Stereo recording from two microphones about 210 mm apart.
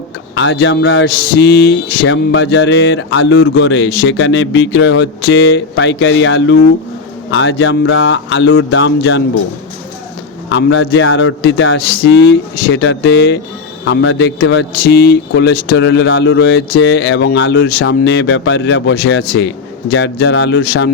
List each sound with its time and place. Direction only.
0.3 s speech: 60° left (ahead or behind)
2.0 s speech: 60° left (ahead or behind)
10.5 s speech: 60° left (ahead or behind)